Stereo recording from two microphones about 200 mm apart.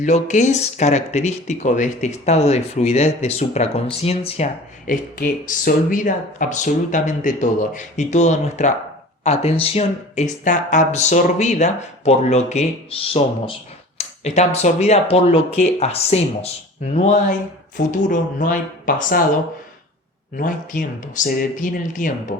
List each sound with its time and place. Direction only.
0.0 s speech: 35° left (ahead or behind)
4.9 s speech: 40° left (ahead or behind)
20.3 s speech: 40° left (ahead or behind)